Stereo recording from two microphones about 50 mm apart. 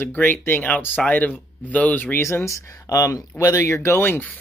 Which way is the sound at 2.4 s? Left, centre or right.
Left.